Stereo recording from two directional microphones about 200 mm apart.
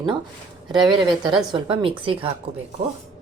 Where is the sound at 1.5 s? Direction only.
25° right (ahead or behind).